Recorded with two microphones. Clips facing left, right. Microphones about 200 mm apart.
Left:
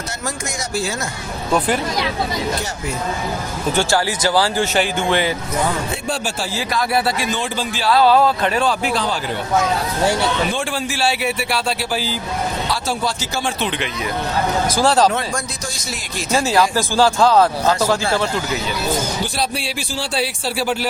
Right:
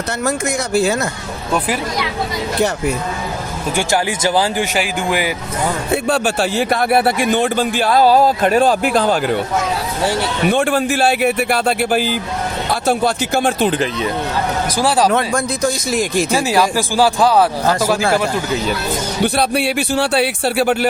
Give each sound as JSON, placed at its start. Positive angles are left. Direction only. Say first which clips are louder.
{"t": 0.3, "sound": "a man's voice", "louder": "right 8 dB", "side_deg": -60}
{"t": 1.5, "sound": "speech", "louder": "left 1 dB", "side_deg": -5}
{"t": 3.8, "sound": "speech", "louder": "right 1 dB", "side_deg": -20}
{"t": 5.9, "sound": "a man's voice", "louder": "right 7 dB", "side_deg": -65}
{"t": 10.5, "sound": "a man's voice", "louder": "right 8 dB", "side_deg": -60}
{"t": 14.8, "sound": "speech", "louder": "even", "side_deg": -10}
{"t": 16.3, "sound": "speech", "louder": "left 3 dB", "side_deg": -15}
{"t": 19.2, "sound": "a man's voice", "louder": "right 7 dB", "side_deg": -60}